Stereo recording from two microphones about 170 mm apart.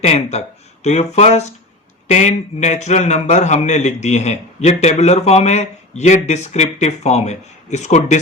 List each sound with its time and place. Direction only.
0.0 s a man's voice: 40° left (ahead or behind)